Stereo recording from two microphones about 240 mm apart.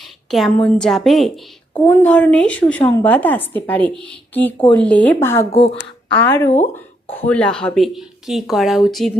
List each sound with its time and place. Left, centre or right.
0.3 s a woman's voice: centre
5.5 s speech: left
6.1 s a woman's voice: centre